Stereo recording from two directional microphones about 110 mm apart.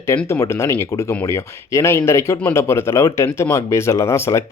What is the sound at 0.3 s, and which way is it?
Speech, 25° left (ahead or behind).